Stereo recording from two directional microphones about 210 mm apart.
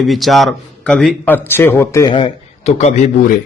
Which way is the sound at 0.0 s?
Centre (ahead or behind).